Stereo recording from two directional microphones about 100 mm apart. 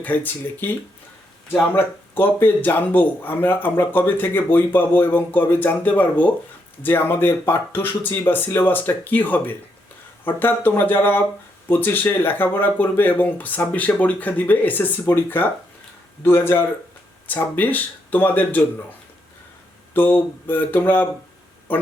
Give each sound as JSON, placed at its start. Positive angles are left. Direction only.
{"t": 0.0, "sound": "speech", "side_deg": 15}
{"t": 19.9, "sound": "speech", "side_deg": 20}